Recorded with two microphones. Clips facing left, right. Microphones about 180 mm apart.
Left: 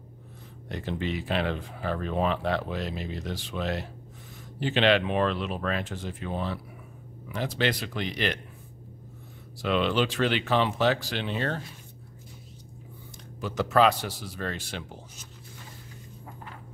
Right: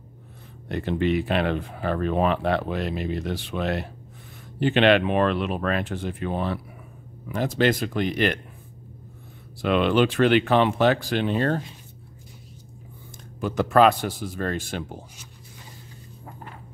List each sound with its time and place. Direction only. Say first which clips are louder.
0.7 s speech: right 8 dB; 60° right (ahead or behind)
7.2 s a man's voice: right 6 dB; 45° right (ahead or behind)
9.6 s speech: right 5 dB; 55° right (ahead or behind)
13.4 s a man's voice: right 4 dB; 50° right (ahead or behind)